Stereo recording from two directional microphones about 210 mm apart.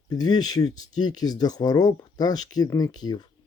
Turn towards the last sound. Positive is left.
turn(degrees=20)  # may be behind; listen again after turning